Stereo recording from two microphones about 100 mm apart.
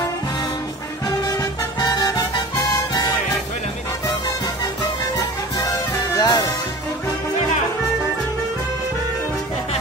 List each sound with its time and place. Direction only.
1.0 s music: 40° left (ahead or behind)
5.6 s music: 40° left (ahead or behind)